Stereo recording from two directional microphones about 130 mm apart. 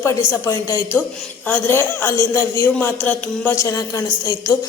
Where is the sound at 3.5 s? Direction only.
20° left (ahead or behind).